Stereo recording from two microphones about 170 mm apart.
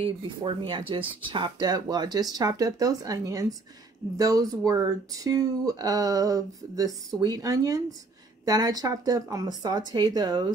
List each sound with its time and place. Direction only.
0.0 s speech: 30° right (ahead or behind)